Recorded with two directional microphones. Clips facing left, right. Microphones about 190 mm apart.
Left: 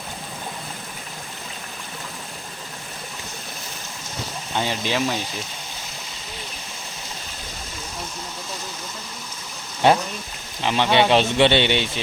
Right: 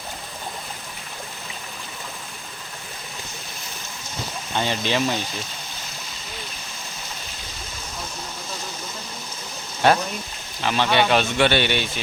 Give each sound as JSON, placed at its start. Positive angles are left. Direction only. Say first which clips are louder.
{"t": 4.5, "sound": "speech", "louder": "right 1 dB", "side_deg": 10}
{"t": 9.8, "sound": "a man's voice", "louder": "left 1 dB", "side_deg": 20}